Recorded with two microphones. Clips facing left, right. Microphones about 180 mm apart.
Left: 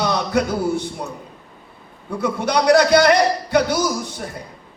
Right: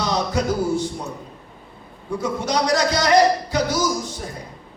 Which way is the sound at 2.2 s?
60° left (ahead or behind).